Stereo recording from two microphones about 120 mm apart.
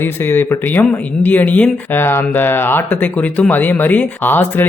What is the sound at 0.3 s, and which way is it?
Speech, 20° left (ahead or behind).